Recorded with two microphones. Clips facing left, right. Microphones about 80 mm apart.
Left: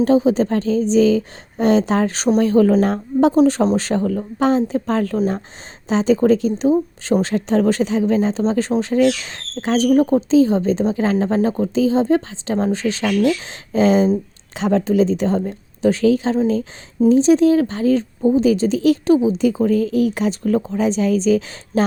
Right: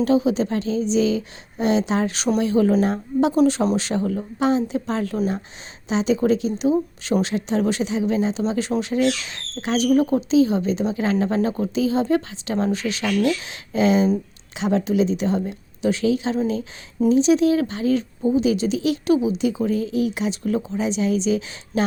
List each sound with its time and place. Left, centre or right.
0.0 s speech: left